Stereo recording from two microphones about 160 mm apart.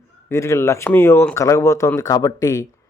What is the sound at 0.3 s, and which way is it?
Speech, 15° left (ahead or behind).